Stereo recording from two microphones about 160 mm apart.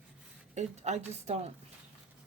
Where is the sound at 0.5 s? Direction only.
45° right (ahead or behind).